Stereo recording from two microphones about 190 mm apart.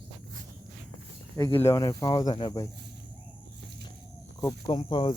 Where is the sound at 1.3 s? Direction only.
15° left (ahead or behind).